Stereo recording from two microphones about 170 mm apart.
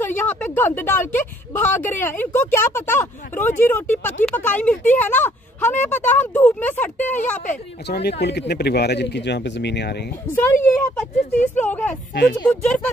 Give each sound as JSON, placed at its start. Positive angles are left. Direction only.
{"t": 0.0, "sound": "speech", "side_deg": 10}
{"t": 7.9, "sound": "speech", "side_deg": 75}
{"t": 10.3, "sound": "speech", "side_deg": 10}
{"t": 12.1, "sound": "speech", "side_deg": 70}
{"t": 12.4, "sound": "speech", "side_deg": 5}